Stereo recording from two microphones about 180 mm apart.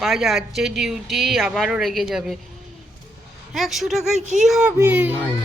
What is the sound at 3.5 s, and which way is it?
Speech, centre (ahead or behind).